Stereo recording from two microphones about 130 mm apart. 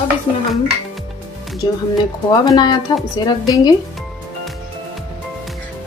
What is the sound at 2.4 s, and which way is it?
Speech, 30° left (ahead or behind).